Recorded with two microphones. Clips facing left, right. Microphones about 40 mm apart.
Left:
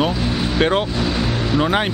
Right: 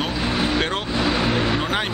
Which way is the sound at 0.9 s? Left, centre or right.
Centre.